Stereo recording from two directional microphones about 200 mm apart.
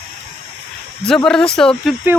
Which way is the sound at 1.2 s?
5° left (ahead or behind).